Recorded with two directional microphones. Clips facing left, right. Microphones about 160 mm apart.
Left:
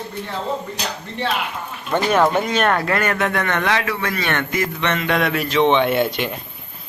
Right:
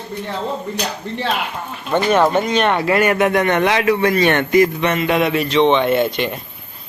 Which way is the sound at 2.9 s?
15° right (ahead or behind).